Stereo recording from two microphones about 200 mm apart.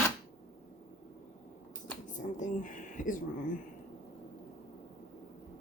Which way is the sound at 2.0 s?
40° left (ahead or behind).